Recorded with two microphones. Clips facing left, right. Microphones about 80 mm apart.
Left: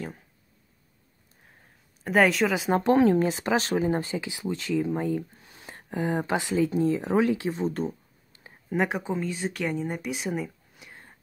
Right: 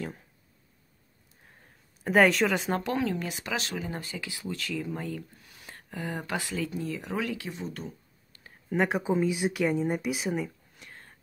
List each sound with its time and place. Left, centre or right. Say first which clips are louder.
2.0 s speech: even; centre
2.8 s speech: left 10 dB; left
8.6 s speech: even; centre